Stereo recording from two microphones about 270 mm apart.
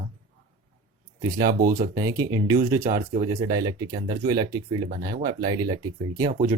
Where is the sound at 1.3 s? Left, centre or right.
Centre.